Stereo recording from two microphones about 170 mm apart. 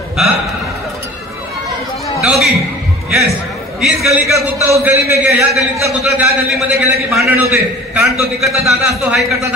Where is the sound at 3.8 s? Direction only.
Centre (ahead or behind).